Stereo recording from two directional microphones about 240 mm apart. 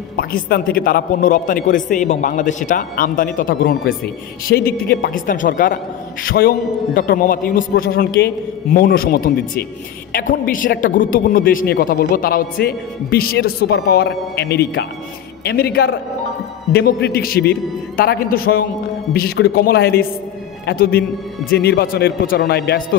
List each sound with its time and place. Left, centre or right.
0.2 s a man's voice: left